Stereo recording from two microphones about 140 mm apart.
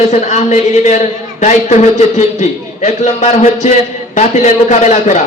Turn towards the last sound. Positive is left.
turn(degrees=55)  # may be behind; listen again after turning